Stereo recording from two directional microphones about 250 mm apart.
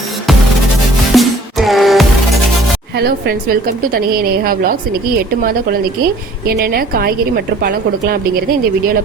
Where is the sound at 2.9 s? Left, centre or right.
Right.